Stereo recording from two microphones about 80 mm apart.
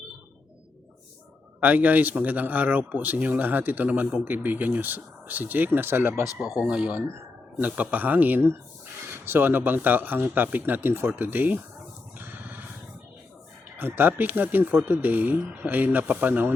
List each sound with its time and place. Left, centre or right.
1.6 s speech: right
6.2 s speech: left
6.6 s speech: centre
12.1 s a sound: right
13.7 s speech: right